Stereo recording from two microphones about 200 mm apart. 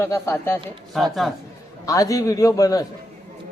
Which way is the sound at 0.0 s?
15° left (ahead or behind).